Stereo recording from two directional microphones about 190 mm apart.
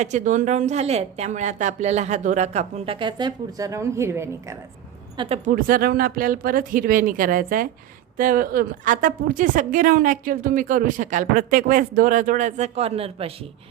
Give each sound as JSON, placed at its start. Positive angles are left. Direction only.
{"t": 0.0, "sound": "a woman's voice", "side_deg": -40}
{"t": 5.1, "sound": "speech", "side_deg": -25}
{"t": 5.5, "sound": "speech", "side_deg": -50}